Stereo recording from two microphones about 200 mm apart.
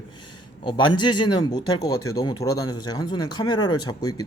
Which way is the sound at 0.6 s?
25° left (ahead or behind).